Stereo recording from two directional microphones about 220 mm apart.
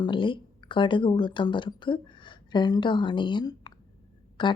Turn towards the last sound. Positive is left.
turn(degrees=20)  # may be behind; listen again after turning